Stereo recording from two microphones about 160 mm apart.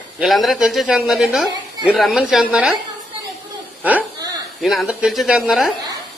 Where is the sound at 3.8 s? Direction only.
10° right (ahead or behind).